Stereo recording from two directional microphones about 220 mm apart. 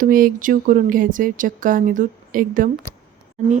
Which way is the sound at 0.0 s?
40° right (ahead or behind).